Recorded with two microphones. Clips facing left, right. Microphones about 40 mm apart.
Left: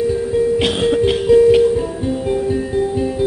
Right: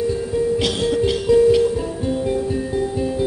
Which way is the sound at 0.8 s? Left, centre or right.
Left.